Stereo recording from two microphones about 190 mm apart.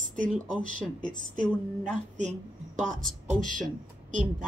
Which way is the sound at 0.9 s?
5° left (ahead or behind).